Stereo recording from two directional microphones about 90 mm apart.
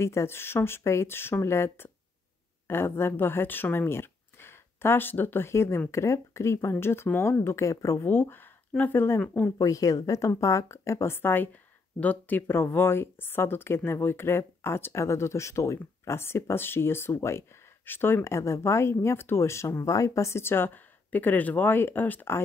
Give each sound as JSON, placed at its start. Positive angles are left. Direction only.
{"t": 0.0, "sound": "speech", "side_deg": 30}
{"t": 8.1, "sound": "speech", "side_deg": 25}
{"t": 9.6, "sound": "speech", "side_deg": 40}